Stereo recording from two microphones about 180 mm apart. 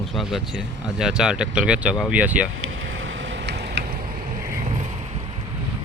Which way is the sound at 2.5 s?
90° right.